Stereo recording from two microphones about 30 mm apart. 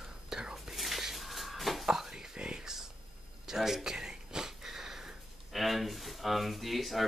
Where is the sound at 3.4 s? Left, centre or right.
Centre.